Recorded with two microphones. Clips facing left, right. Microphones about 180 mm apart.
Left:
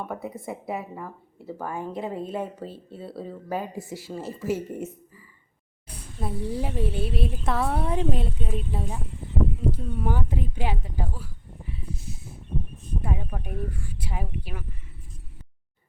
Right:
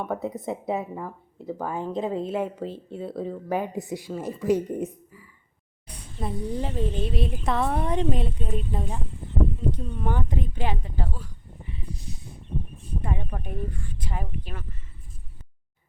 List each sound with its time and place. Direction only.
0.0 s a woman's voice: 20° right (ahead or behind)
2.9 s speech: 5° left (ahead or behind)
3.5 s speech: 20° right (ahead or behind)
5.9 s a woman's voice: 5° left (ahead or behind)